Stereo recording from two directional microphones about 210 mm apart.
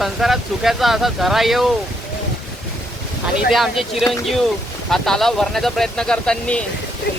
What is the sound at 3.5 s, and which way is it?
Speech, centre (ahead or behind).